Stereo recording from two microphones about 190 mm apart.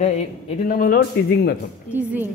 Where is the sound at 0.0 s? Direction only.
35° left (ahead or behind); by 1.6 s 55° left (ahead or behind).